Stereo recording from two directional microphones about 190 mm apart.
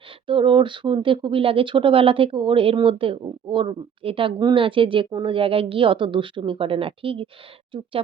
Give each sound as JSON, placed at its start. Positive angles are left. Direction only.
{"t": 0.3, "sound": "speech", "side_deg": -25}